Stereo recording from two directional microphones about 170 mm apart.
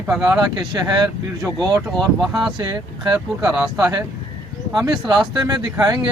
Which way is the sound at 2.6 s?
25° right (ahead or behind).